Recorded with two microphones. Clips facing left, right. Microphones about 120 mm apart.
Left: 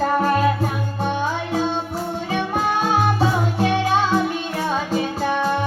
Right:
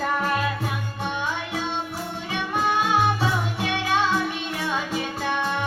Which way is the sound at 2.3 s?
40° left (ahead or behind).